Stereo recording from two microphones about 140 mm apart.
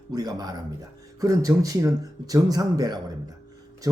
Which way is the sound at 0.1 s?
30° right (ahead or behind).